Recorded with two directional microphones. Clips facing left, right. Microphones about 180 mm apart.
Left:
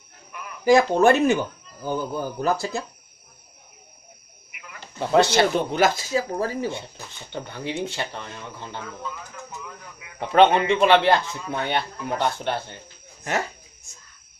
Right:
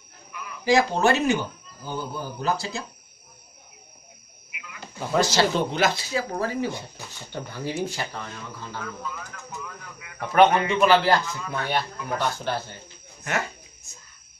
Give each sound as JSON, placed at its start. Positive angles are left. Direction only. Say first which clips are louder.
{"t": 0.3, "sound": "speech", "louder": "left 4 dB", "side_deg": 50}
{"t": 5.1, "sound": "speech", "louder": "left 4 dB", "side_deg": 65}
{"t": 5.7, "sound": "speech", "louder": "left 3 dB", "side_deg": 45}
{"t": 7.5, "sound": "speech", "louder": "even", "side_deg": 20}
{"t": 9.9, "sound": "speech", "louder": "left 2 dB", "side_deg": 25}